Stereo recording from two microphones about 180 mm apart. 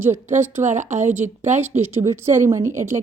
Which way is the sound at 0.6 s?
40° right (ahead or behind).